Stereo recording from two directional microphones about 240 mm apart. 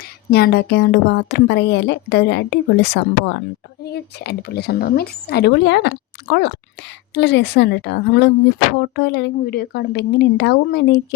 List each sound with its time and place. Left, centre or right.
0.3 s a woman's voice: left